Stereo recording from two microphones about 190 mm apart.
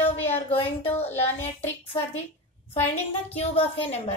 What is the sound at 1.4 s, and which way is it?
Speech, 30° left (ahead or behind).